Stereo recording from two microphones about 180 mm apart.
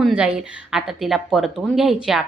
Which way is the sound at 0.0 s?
5° right (ahead or behind).